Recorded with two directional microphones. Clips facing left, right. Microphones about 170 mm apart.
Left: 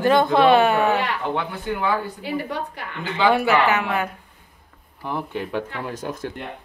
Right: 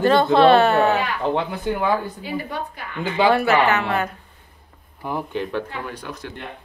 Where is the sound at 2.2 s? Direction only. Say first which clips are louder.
Left 1 dB; 70° left (ahead or behind).